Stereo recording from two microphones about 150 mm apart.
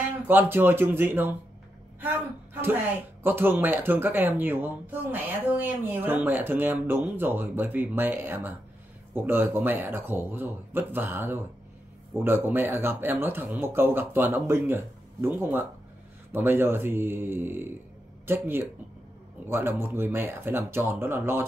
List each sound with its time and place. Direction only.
0.3 s speech: 15° right (ahead or behind)
2.6 s speech: 15° right (ahead or behind)